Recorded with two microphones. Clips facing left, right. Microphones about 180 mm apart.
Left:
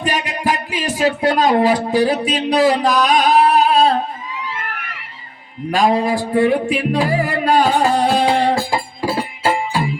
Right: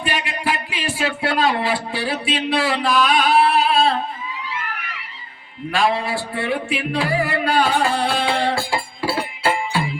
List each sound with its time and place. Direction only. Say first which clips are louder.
0.0 s speech: left 4 dB; 40° left (ahead or behind)
5.7 s music: left 5 dB; 40° left (ahead or behind)